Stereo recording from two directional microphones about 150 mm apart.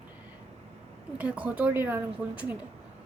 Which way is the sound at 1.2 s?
10° right (ahead or behind).